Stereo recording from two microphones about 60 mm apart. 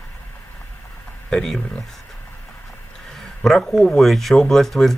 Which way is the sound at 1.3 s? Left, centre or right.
Centre.